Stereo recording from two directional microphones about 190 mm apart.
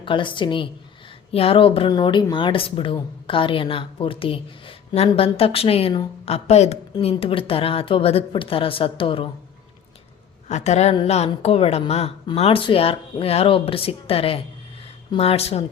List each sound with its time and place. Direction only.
0.0 s speech: 25° left (ahead or behind)
10.5 s a woman's voice: 35° left (ahead or behind)